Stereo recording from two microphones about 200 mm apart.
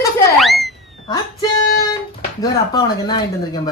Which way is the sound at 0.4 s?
Centre (ahead or behind).